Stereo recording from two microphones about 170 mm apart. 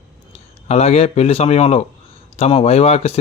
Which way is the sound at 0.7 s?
35° left (ahead or behind).